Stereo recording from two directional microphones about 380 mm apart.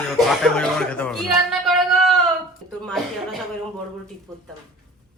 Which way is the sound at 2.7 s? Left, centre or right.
Centre.